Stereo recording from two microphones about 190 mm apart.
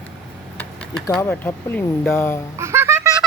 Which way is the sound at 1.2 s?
10° left (ahead or behind).